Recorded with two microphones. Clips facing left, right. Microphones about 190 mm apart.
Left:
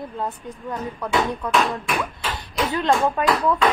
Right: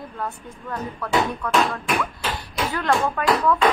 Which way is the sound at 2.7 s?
20° left (ahead or behind).